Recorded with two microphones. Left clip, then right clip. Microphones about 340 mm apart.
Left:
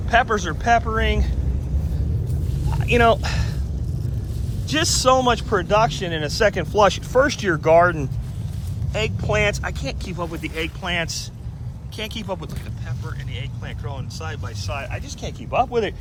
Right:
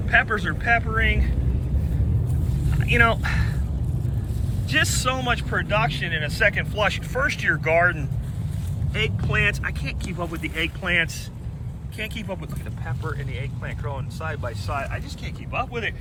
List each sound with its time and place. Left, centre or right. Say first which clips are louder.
0.1 s speech: left 2 dB; centre
2.8 s speech: left 3 dB; centre
4.7 s speech: left 5 dB; centre
8.9 s speech: left 1 dB; left
9.3 s speech: left 3 dB; centre
14.2 s speech: right 2 dB; centre